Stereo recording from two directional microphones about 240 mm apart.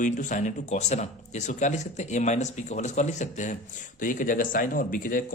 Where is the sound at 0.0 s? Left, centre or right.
Left.